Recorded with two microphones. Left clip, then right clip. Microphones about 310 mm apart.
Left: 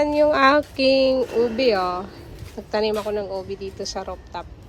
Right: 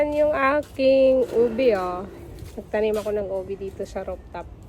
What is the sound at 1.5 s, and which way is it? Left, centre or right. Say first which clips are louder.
Speech: left 1 dB; centre.